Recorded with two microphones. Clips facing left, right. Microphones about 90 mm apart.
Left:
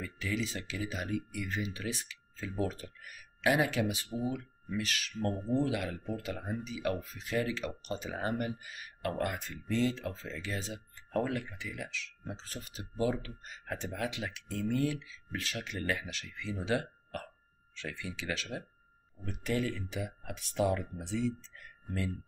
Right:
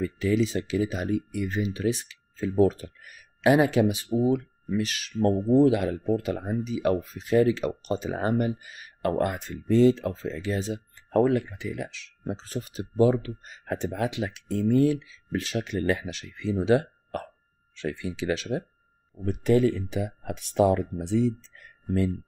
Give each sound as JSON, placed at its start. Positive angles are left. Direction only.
{"t": 0.0, "sound": "speech", "side_deg": -25}
{"t": 6.6, "sound": "speech", "side_deg": -20}